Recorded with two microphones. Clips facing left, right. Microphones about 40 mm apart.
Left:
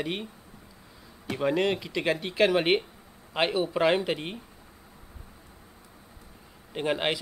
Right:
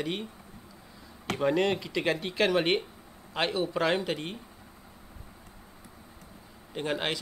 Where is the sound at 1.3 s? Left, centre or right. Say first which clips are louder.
Left 1 dB; centre.